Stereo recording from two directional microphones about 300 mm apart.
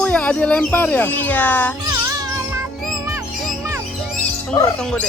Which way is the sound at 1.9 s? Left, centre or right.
Centre.